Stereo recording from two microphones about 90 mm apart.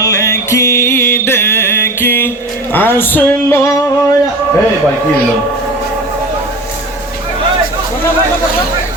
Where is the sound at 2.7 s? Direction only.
25° left (ahead or behind).